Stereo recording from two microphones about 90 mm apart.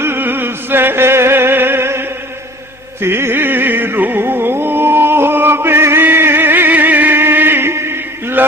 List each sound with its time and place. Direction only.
0.0 s music: 25° right (ahead or behind)